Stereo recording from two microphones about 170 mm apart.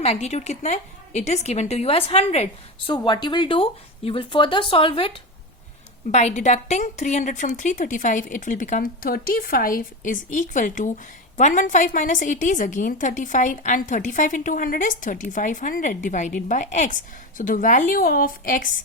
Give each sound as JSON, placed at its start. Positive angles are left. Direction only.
{"t": 0.0, "sound": "a woman's voice", "side_deg": 40}
{"t": 2.9, "sound": "speech", "side_deg": 25}
{"t": 6.1, "sound": "a woman's voice", "side_deg": 40}